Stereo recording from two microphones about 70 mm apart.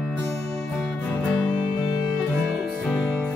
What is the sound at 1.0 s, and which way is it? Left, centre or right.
Music, centre.